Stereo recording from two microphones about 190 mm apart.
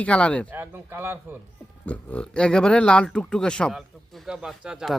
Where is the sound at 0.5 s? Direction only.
10° right (ahead or behind).